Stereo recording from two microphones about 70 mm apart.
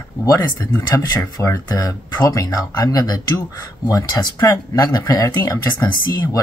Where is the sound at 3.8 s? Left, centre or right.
Left.